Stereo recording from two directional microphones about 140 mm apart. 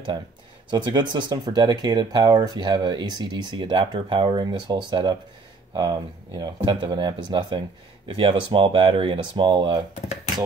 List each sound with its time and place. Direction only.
0.7 s speech: 35° right (ahead or behind)